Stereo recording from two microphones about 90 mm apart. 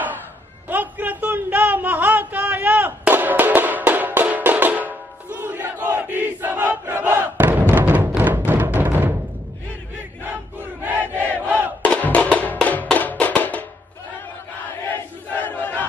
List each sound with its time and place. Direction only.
0.7 s a sound: 20° right (ahead or behind)
8.5 s music: 20° right (ahead or behind)
10.2 s battle cry: 20° right (ahead or behind)
11.3 s crowd: 20° right (ahead or behind)
11.8 s music: 15° left (ahead or behind)
15.3 s battle cry: 20° left (ahead or behind)